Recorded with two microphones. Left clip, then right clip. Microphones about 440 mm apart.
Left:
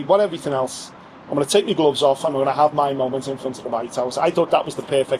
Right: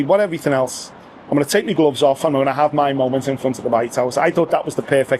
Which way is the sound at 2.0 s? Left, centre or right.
Right.